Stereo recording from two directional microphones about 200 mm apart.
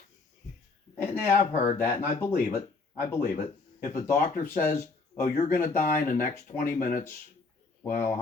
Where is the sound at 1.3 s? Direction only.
40° left (ahead or behind).